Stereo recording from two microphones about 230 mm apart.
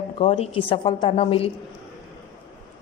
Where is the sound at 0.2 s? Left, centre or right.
Left.